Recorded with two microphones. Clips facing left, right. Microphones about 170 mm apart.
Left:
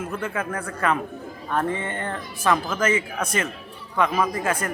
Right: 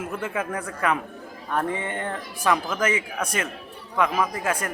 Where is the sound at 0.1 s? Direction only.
20° right (ahead or behind).